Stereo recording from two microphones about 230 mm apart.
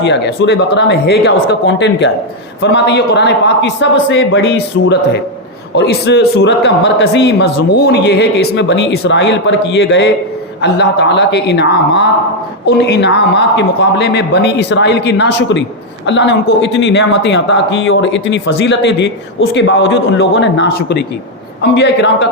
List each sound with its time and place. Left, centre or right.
0.0 s a man's voice: left